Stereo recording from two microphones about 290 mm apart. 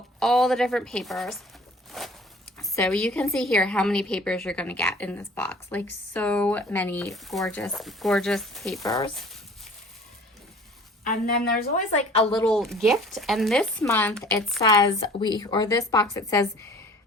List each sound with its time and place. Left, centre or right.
0.2 s a woman's voice: centre
1.9 s a sound: centre
2.6 s a woman's voice: centre
8.8 s speech: centre
11.0 s a woman's voice: left
12.1 s speech: centre
12.5 s a woman's voice: centre
14.6 s speech: centre